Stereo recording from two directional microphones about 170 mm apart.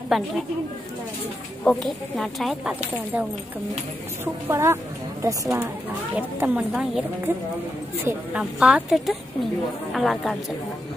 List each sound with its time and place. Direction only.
0.1 s speech: centre (ahead or behind)
1.6 s speech: 5° left (ahead or behind)
4.2 s a woman's voice: 15° right (ahead or behind)
6.1 s speech: 5° right (ahead or behind)